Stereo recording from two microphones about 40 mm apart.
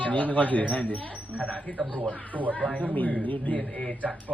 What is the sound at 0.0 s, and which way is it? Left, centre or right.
A woman's voice, left.